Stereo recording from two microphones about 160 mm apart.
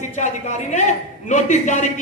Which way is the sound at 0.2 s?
45° left (ahead or behind).